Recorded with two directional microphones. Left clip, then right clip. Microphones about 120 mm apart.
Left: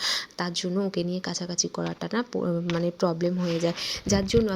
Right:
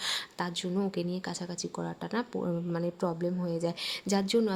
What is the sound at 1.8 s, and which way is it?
Speech, 25° left (ahead or behind).